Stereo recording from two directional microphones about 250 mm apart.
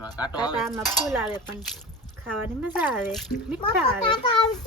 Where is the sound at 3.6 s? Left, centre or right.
Centre.